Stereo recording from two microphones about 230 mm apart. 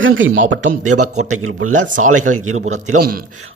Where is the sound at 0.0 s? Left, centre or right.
Right.